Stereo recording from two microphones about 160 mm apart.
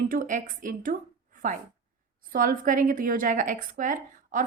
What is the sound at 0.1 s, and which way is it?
Speech, 55° right (ahead or behind).